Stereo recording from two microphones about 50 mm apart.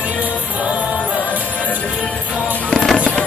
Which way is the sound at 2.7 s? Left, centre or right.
Centre.